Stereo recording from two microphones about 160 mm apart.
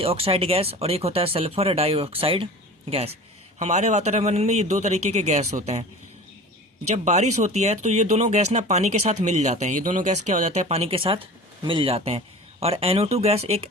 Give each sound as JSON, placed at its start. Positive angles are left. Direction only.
{"t": 0.0, "sound": "speech", "side_deg": -35}
{"t": 6.9, "sound": "speech", "side_deg": -45}